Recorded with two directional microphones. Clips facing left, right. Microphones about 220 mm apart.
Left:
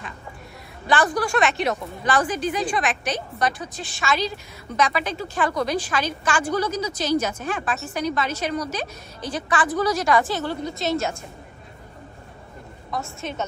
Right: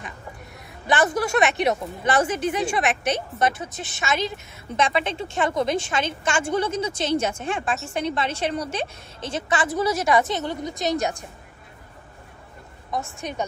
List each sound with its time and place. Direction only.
0.8 s a woman's voice: 20° right (ahead or behind)
9.8 s a woman's voice: 5° right (ahead or behind)
10.1 s a woman's voice: 20° right (ahead or behind)
12.9 s a woman's voice: 15° right (ahead or behind)